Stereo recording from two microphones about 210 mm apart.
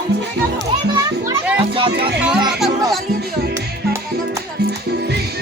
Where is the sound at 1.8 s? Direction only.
25° right (ahead or behind).